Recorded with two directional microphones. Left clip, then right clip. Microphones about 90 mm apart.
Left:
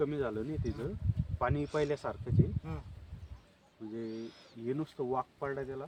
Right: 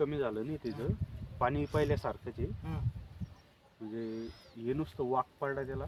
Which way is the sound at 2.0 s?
20° left (ahead or behind).